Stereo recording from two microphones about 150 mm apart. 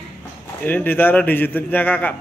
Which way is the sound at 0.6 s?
10° left (ahead or behind).